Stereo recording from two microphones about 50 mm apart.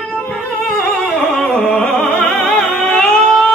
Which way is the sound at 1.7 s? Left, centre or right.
Centre.